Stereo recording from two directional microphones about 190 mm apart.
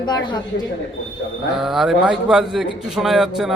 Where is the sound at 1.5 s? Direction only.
Centre (ahead or behind).